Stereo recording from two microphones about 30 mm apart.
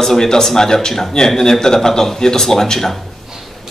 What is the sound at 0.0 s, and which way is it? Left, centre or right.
Speech, centre.